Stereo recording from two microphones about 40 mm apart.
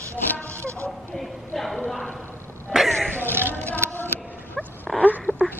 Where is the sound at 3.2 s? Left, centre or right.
Right.